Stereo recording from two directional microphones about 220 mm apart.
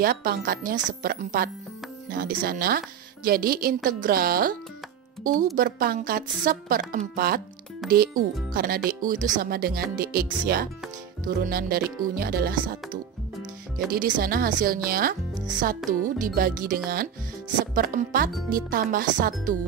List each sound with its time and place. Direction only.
0.0 s a woman's voice: 40° right (ahead or behind)
15.8 s speech: centre (ahead or behind)
16.3 s a woman's voice: 40° right (ahead or behind)